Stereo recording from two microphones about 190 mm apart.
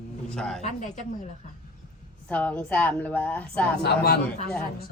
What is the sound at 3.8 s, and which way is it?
Speech, 55° left (ahead or behind).